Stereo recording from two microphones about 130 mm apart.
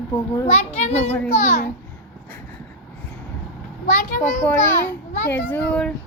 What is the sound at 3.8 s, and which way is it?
Speech, 80° left.